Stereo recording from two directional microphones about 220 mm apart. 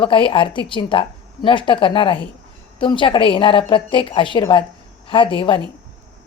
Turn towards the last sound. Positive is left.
turn(degrees=25)  # may be behind; listen again after turning